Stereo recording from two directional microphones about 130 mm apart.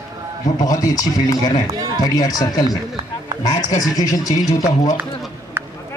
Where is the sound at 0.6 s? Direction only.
25° left (ahead or behind).